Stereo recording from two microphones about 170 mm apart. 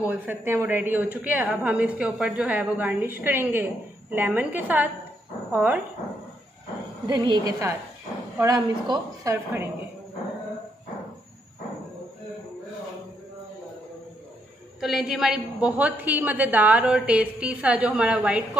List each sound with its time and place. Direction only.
0.0 s a woman's voice: 10° right (ahead or behind)
7.1 s a woman's voice: 25° right (ahead or behind)
14.8 s a woman's voice: centre (ahead or behind)